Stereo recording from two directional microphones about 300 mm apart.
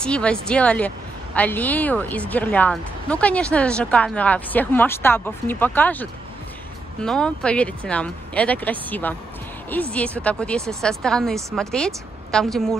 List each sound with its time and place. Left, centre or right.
0.0 s a woman's voice: centre